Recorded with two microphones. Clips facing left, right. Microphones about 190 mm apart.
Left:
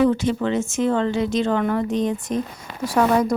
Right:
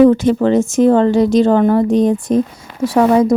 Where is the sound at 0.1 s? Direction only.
45° right (ahead or behind).